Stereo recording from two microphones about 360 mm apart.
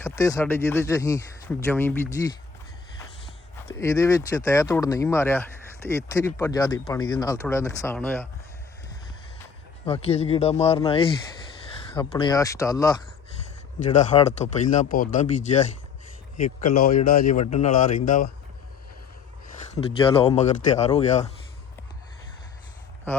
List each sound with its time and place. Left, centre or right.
0.0 s speech: centre
3.7 s speech: centre
9.8 s speech: centre
19.7 s speech: centre